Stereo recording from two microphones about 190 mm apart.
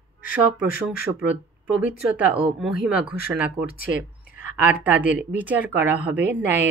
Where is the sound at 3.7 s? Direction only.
50° left (ahead or behind).